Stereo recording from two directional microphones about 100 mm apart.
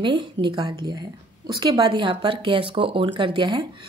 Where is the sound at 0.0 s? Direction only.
50° right (ahead or behind).